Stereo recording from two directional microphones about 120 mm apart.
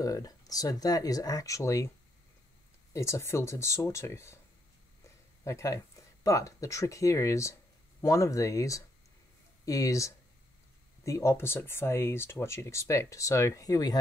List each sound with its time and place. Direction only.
0.0 s speech: 30° left (ahead or behind)
2.9 s speech: 25° left (ahead or behind)